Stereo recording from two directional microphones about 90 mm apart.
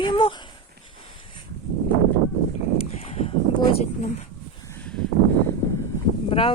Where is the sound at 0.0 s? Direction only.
70° left (ahead or behind).